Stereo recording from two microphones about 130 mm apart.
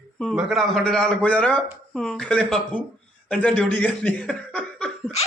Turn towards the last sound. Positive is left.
turn(degrees=10)  # may be behind; listen again after turning